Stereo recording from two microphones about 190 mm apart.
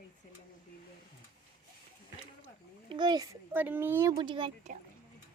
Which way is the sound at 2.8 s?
25° right (ahead or behind).